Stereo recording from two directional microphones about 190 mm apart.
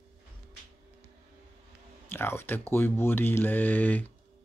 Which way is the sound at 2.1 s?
10° left (ahead or behind).